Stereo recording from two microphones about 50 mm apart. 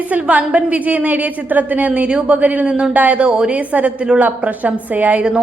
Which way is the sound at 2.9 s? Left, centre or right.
Right.